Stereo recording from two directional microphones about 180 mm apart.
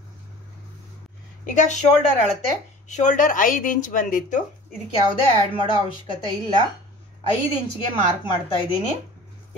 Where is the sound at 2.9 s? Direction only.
40° left (ahead or behind).